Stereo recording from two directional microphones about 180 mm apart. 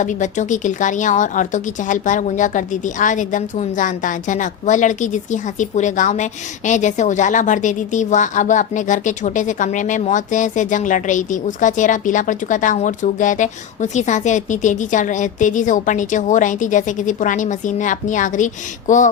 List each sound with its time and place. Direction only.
0.0 s a woman's voice: 45° left (ahead or behind)